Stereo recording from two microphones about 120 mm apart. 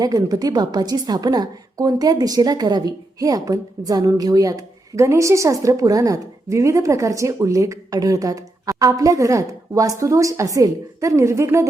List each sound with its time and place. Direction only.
0.0 s a woman's voice: 30° right (ahead or behind)